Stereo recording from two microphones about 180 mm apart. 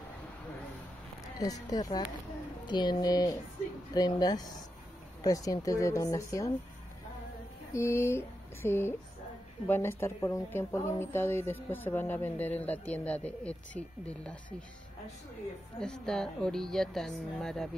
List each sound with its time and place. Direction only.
1.4 s speech: 20° left (ahead or behind)
7.7 s a sound: 15° left (ahead or behind)
9.7 s speech: 15° left (ahead or behind)
15.8 s speech: 5° left (ahead or behind)